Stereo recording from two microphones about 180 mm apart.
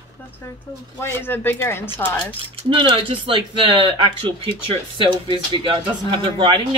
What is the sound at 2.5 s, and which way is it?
Speech, 30° right (ahead or behind).